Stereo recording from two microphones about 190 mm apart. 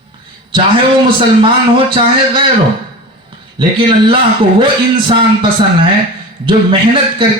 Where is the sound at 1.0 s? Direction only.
25° right (ahead or behind).